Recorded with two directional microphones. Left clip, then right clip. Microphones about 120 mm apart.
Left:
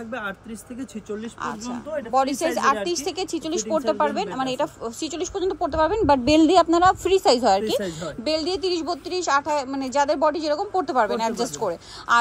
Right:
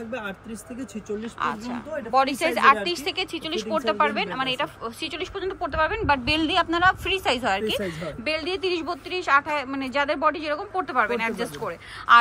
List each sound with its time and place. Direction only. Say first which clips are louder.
2.1 s a woman's voice: even; 30° left (ahead or behind)
8.3 s a woman's voice: left 2 dB; 30° left (ahead or behind)